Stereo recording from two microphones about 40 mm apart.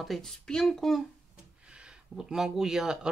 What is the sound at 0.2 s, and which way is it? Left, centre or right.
Speech, centre.